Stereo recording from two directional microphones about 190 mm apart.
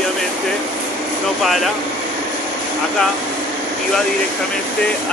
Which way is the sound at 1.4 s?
Centre (ahead or behind).